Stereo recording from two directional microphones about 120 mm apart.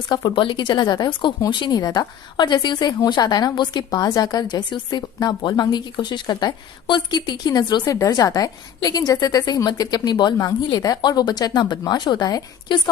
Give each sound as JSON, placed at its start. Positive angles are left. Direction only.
{"t": 0.1, "sound": "speech", "side_deg": 40}